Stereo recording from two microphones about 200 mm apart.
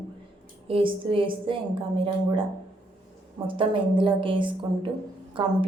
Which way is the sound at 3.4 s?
25° right (ahead or behind).